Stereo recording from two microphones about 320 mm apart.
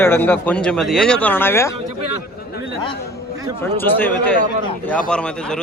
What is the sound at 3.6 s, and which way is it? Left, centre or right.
A man's voice, centre.